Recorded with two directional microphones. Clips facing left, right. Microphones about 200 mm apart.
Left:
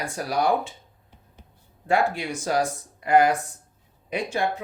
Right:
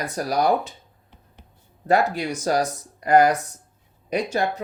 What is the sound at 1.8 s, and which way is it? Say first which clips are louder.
Speech: right 3 dB; 40° right (ahead or behind).